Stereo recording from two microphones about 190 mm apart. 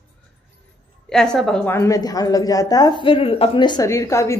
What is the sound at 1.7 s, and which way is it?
Speech, 15° left (ahead or behind).